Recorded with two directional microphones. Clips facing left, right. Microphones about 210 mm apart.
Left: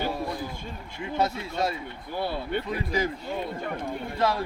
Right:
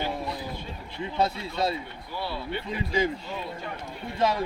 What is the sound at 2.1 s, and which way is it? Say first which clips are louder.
Speech: left 3 dB; 50° left (ahead or behind).